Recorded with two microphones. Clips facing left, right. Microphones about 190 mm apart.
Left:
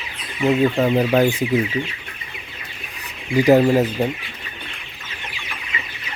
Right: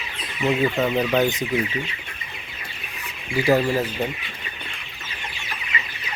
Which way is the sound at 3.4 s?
15° left (ahead or behind).